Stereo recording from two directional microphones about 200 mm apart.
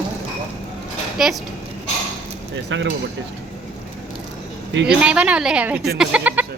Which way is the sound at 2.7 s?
70° right (ahead or behind).